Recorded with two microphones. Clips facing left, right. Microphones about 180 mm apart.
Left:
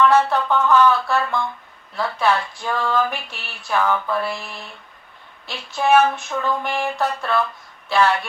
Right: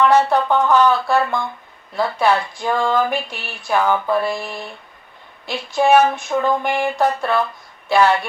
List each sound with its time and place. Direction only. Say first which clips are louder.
0.0 s speech: right 2 dB; 15° right (ahead or behind)